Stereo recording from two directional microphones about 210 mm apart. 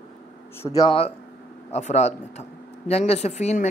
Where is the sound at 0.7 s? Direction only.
25° left (ahead or behind).